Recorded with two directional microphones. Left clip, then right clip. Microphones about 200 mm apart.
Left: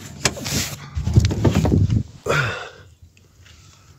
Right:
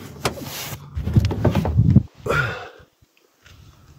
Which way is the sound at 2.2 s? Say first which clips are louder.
Left 5 dB; 20° left (ahead or behind).